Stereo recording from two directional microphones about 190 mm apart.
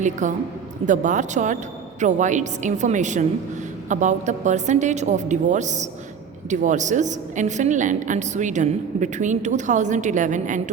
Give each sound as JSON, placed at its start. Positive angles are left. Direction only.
{"t": 0.0, "sound": "a woman's voice", "side_deg": -40}